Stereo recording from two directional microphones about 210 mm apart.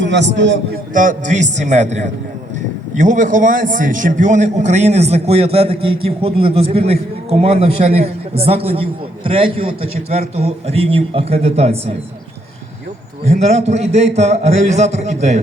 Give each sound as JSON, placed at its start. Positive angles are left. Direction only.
{"t": 0.0, "sound": "a man's voice", "side_deg": -60}
{"t": 0.9, "sound": "a man's voice", "side_deg": -35}
{"t": 13.2, "sound": "a man's voice", "side_deg": -30}